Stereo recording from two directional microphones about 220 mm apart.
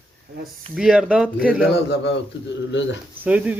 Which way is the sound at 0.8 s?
5° right (ahead or behind).